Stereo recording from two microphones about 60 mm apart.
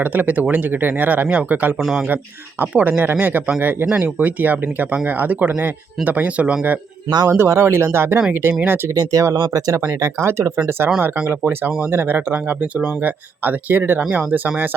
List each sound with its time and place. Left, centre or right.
0.0 s a man's voice: right
7.3 s speech: right
8.9 s speech: right
9.2 s speech: right
9.5 s speech: right
9.9 s speech: right
11.3 s speech: right